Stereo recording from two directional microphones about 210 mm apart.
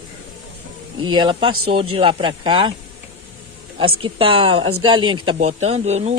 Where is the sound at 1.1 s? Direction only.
25° right (ahead or behind).